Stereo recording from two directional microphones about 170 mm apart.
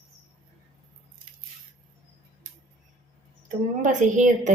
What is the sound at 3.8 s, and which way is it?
Speech, 45° right (ahead or behind).